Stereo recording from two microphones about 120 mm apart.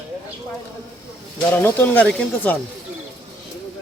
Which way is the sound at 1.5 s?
15° left (ahead or behind).